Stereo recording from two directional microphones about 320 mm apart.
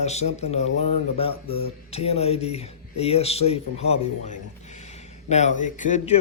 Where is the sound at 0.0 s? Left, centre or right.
Left.